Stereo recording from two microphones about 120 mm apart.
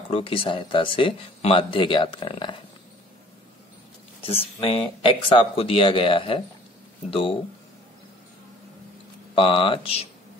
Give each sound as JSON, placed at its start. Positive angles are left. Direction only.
{"t": 0.1, "sound": "speech", "side_deg": 50}
{"t": 4.2, "sound": "speech", "side_deg": 50}
{"t": 9.3, "sound": "speech", "side_deg": 45}